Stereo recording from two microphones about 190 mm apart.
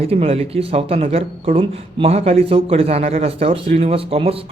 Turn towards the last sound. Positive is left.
turn(degrees=-30)  # may be behind; listen again after turning